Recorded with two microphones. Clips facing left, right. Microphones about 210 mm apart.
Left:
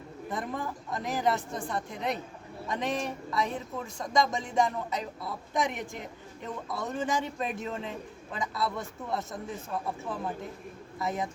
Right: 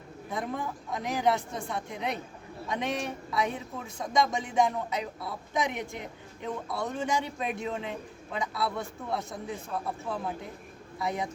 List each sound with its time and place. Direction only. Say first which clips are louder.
0.3 s speech: right 1 dB; centre (ahead or behind)
11.0 s speech: even; centre (ahead or behind)